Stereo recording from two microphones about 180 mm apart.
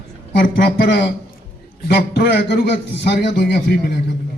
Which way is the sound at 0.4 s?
65° left (ahead or behind).